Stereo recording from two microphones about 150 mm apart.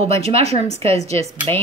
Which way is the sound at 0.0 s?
40° right (ahead or behind).